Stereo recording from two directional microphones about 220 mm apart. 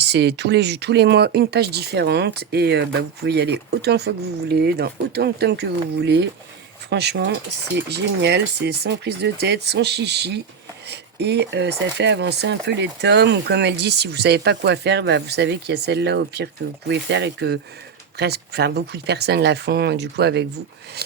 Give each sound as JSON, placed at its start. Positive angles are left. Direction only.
{"t": 0.0, "sound": "speech", "side_deg": -50}
{"t": 6.9, "sound": "speech", "side_deg": -50}